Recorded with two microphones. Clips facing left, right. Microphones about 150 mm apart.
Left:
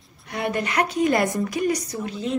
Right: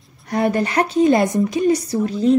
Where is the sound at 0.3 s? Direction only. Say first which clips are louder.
Right 7 dB; 35° right (ahead or behind).